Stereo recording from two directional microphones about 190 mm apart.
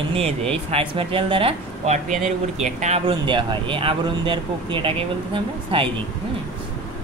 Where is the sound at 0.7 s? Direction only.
30° right (ahead or behind).